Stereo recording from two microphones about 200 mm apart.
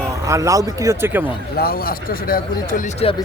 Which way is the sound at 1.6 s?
50° left (ahead or behind).